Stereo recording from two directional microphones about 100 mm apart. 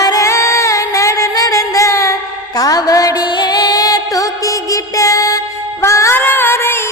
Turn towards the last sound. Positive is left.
turn(degrees=25)  # may be behind; listen again after turning